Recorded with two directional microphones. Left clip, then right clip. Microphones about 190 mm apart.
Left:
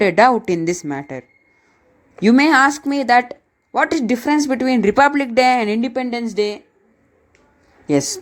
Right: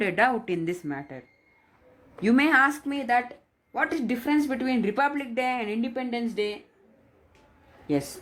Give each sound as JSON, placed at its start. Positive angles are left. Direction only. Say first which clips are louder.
{"t": 0.0, "sound": "a woman's voice", "louder": "left 11 dB", "side_deg": 30}